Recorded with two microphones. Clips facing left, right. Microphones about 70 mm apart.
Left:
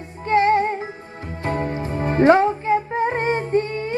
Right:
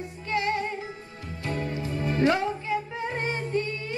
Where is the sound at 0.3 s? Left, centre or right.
Left.